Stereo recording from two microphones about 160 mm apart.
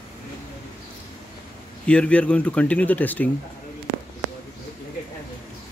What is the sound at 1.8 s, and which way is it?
Speech, 5° left (ahead or behind).